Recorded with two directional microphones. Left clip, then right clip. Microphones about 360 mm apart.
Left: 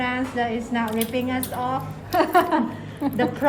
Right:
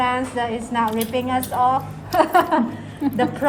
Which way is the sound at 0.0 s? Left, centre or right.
Centre.